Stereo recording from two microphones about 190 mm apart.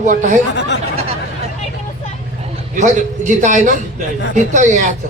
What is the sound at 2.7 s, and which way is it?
Speech, 40° right (ahead or behind).